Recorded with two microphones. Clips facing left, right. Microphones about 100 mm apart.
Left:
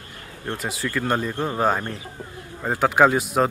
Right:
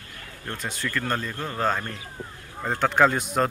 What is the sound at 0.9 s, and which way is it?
Speech, 15° left (ahead or behind).